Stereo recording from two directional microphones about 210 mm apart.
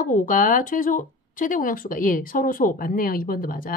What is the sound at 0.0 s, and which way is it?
Speech, 40° left (ahead or behind).